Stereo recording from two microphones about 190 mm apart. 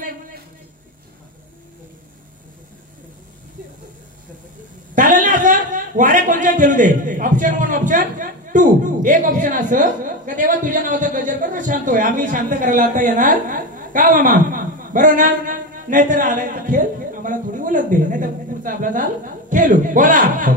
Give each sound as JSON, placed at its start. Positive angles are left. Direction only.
{"t": 4.9, "sound": "a man's voice", "side_deg": -45}